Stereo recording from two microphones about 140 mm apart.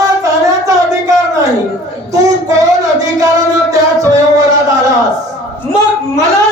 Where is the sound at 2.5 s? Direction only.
25° right (ahead or behind).